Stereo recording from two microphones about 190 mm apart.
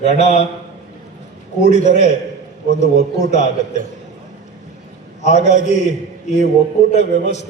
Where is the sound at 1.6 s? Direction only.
35° left (ahead or behind).